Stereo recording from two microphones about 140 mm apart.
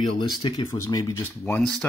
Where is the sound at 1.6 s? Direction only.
5° left (ahead or behind).